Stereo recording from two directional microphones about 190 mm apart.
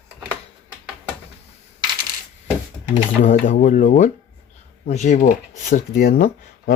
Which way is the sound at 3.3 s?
45° left (ahead or behind).